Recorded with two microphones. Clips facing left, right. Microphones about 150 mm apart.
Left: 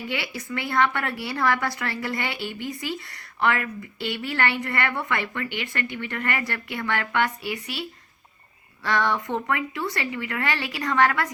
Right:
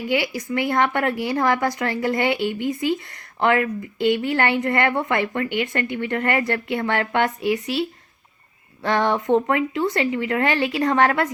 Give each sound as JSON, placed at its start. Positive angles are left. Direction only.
{"t": 0.0, "sound": "a woman's voice", "side_deg": -15}